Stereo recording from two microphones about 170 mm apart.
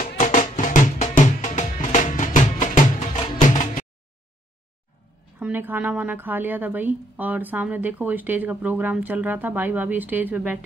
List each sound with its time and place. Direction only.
0.2 s music: 45° left (ahead or behind)
5.4 s a woman's voice: 10° right (ahead or behind)